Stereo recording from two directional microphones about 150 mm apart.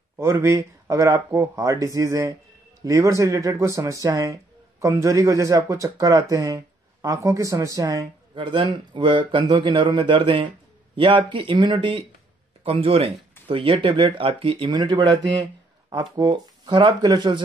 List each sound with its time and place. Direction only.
0.2 s speech: 20° right (ahead or behind)